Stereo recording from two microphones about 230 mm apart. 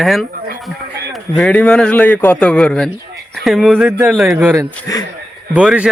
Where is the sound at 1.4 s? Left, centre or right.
Centre.